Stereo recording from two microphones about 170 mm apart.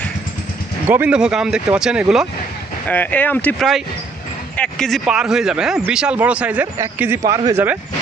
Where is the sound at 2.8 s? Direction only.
10° left (ahead or behind); by 7.8 s 10° right (ahead or behind).